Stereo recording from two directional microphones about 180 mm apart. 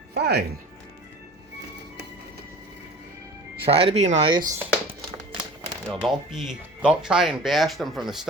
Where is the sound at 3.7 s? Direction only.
30° right (ahead or behind).